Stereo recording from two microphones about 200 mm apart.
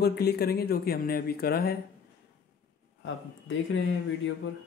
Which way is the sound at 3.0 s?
70° left (ahead or behind).